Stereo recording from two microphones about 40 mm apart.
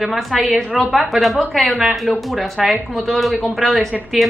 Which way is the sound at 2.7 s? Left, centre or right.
Centre.